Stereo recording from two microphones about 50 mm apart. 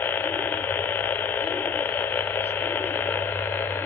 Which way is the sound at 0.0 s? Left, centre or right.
Left.